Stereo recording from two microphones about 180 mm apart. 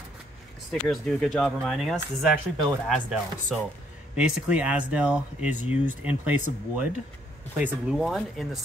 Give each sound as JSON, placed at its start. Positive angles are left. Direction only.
{"t": 0.7, "sound": "speech", "side_deg": 0}